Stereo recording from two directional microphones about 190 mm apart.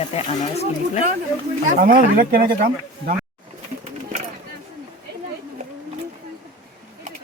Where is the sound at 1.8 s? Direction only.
50° right (ahead or behind).